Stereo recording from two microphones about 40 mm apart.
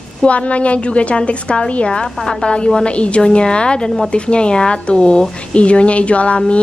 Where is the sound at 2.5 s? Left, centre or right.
Left.